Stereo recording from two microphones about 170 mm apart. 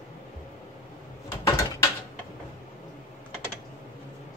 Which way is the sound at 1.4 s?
25° left (ahead or behind).